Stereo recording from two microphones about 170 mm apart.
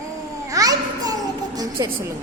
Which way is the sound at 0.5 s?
20° right (ahead or behind).